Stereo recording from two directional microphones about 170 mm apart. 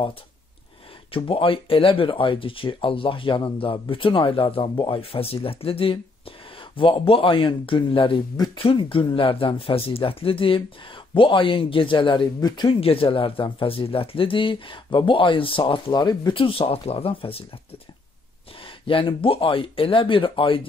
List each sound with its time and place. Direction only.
1.1 s a man's voice: 30° left (ahead or behind)
18.6 s a man's voice: 30° left (ahead or behind)